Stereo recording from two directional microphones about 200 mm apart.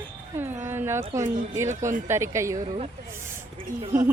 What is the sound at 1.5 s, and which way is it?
Speech, 15° right (ahead or behind).